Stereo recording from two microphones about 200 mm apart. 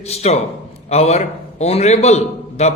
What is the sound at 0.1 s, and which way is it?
A man's voice, 30° left (ahead or behind).